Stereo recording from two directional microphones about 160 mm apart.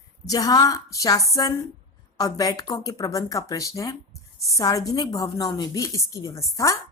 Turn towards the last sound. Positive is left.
turn(degrees=20)  # may be behind; listen again after turning